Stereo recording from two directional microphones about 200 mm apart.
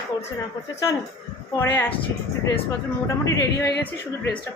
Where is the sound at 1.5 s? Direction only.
10° left (ahead or behind).